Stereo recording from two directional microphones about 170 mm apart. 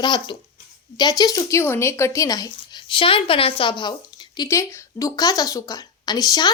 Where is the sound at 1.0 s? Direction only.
25° left (ahead or behind).